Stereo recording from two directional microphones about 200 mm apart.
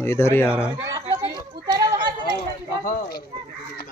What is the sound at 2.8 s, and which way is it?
Speech, 45° left (ahead or behind).